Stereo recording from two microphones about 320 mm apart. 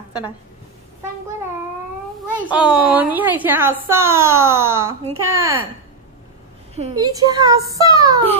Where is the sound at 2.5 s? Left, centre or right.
Centre.